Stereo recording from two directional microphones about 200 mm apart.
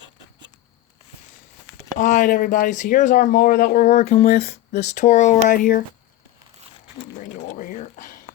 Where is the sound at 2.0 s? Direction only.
40° left (ahead or behind).